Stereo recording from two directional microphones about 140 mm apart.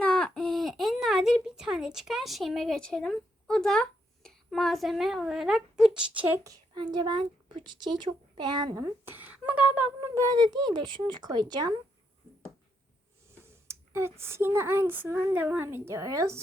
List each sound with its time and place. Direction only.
0.0 s a sound: 5° left (ahead or behind)
6.4 s a woman's voice: 30° right (ahead or behind)
8.7 s speech: 15° right (ahead or behind)
10.2 s a woman's voice: 30° right (ahead or behind)
13.4 s speech: 20° right (ahead or behind)